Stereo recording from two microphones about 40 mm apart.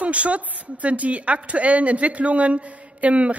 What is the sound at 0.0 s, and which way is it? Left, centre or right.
Speech, right.